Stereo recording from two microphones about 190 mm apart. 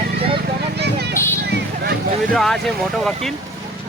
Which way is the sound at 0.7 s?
60° right (ahead or behind).